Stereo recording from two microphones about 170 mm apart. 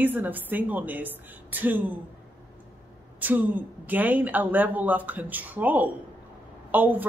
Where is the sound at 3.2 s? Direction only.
10° right (ahead or behind).